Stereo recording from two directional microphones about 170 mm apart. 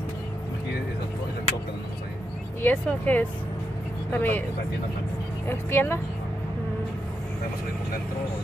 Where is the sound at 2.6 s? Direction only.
10° left (ahead or behind).